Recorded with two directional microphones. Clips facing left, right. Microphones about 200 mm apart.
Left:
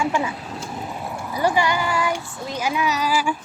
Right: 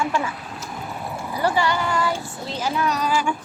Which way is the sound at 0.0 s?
15° left (ahead or behind).